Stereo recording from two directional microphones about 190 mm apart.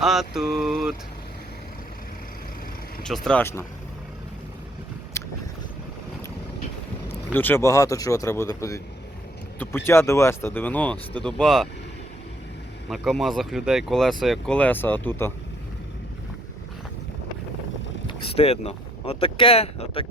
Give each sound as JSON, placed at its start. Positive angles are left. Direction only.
{"t": 0.0, "sound": "speech", "side_deg": 0}
{"t": 3.0, "sound": "speech", "side_deg": 5}
{"t": 5.2, "sound": "boat", "side_deg": 15}
{"t": 7.3, "sound": "speech", "side_deg": 10}
{"t": 12.9, "sound": "speech", "side_deg": 0}
{"t": 18.2, "sound": "speech", "side_deg": 30}